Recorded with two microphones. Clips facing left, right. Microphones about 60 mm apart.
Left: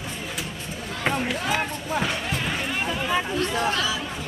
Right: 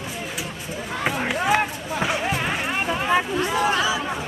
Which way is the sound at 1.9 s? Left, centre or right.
Centre.